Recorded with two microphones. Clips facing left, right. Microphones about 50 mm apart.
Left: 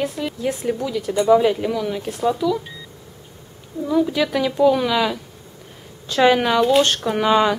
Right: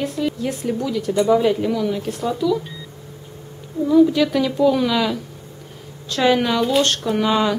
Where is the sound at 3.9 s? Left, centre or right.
Centre.